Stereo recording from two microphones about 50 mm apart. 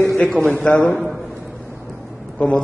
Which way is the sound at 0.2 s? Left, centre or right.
Left.